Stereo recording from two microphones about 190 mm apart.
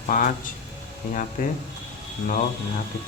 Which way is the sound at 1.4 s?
45° left (ahead or behind).